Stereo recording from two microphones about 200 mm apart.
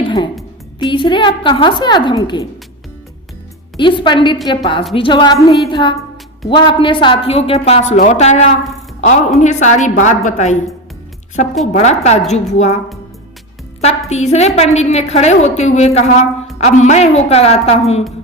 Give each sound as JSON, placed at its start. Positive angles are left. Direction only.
{"t": 0.0, "sound": "music", "side_deg": 20}
{"t": 0.8, "sound": "a woman's voice", "side_deg": 25}
{"t": 3.8, "sound": "a woman's voice", "side_deg": 25}
{"t": 11.6, "sound": "a woman's voice", "side_deg": 35}
{"t": 14.1, "sound": "a woman's voice", "side_deg": 35}